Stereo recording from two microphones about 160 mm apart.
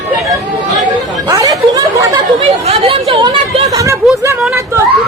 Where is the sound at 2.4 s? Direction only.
35° right (ahead or behind).